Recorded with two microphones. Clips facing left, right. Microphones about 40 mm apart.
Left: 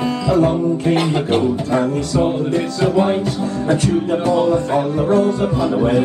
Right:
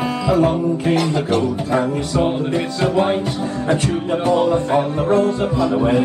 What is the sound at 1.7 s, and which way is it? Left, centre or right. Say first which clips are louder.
Music: right 1 dB; centre.